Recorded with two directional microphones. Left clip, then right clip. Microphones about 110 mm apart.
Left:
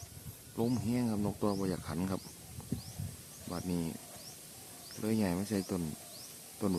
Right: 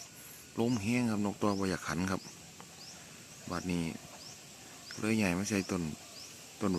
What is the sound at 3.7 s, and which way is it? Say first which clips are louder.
Speech: even; 5° left (ahead or behind).